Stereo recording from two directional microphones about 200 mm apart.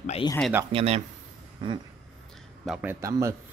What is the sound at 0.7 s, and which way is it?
Speech, 30° right (ahead or behind).